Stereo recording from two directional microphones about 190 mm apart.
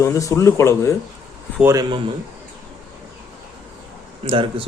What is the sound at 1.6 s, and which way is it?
Speech, 20° right (ahead or behind).